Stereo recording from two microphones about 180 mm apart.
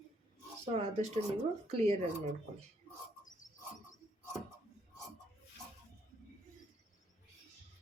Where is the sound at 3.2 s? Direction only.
45° left (ahead or behind).